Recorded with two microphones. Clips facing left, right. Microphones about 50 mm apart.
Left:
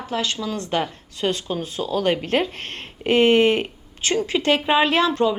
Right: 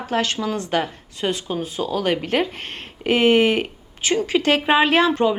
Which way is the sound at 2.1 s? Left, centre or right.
Centre.